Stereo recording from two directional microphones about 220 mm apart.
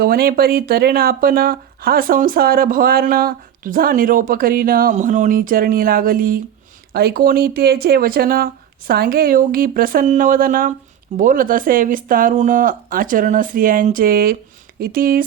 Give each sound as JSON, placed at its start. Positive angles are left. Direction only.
{"t": 0.0, "sound": "speech", "side_deg": -40}